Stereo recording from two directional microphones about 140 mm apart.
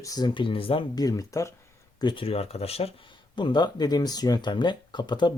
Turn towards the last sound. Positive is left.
turn(degrees=35)  # may be behind; listen again after turning